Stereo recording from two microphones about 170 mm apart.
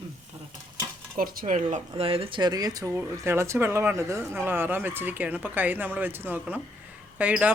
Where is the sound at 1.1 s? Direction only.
55° right (ahead or behind).